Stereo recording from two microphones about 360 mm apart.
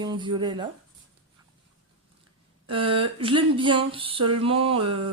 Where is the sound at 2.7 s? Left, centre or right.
Centre.